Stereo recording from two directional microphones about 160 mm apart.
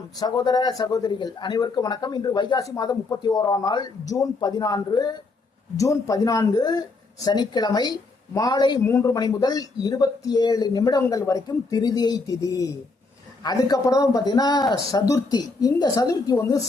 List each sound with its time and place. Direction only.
0.2 s speech: 25° left (ahead or behind)
8.8 s speech: 15° left (ahead or behind)